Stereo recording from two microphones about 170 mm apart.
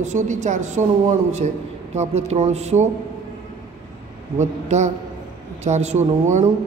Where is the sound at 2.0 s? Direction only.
40° right (ahead or behind).